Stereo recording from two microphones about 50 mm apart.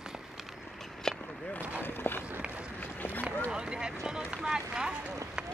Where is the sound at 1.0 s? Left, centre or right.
Centre.